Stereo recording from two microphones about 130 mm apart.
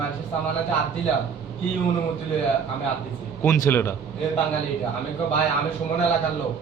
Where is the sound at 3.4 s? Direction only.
20° left (ahead or behind).